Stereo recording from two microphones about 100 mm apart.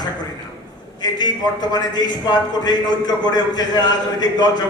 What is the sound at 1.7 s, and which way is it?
A man's voice, 40° left (ahead or behind).